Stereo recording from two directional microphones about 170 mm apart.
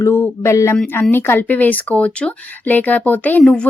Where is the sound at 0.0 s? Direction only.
15° left (ahead or behind).